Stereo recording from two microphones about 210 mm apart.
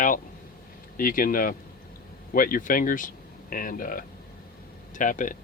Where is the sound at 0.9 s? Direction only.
40° left (ahead or behind).